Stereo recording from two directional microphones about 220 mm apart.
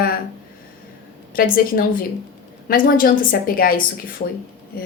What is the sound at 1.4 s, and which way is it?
A woman's voice, 40° left (ahead or behind).